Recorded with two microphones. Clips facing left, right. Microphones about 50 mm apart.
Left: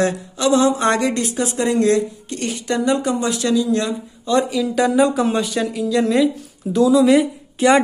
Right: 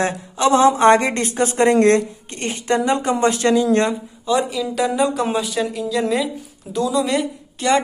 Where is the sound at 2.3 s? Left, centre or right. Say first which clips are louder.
Right 2 dB; right.